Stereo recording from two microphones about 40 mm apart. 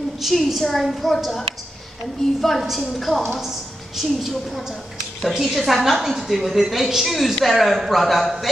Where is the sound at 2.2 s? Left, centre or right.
Centre.